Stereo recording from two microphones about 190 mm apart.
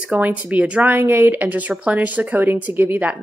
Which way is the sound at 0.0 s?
10° right (ahead or behind).